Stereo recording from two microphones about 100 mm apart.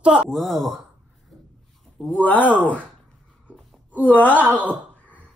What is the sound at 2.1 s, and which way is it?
Speech, 15° left (ahead or behind).